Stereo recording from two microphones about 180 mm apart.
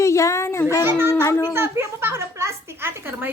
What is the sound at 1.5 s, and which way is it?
Speech, 15° right (ahead or behind).